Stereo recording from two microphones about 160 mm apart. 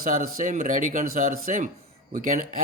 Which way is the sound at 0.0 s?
60° right (ahead or behind).